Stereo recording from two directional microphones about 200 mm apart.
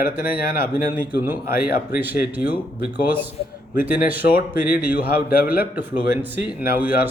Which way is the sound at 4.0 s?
10° right (ahead or behind).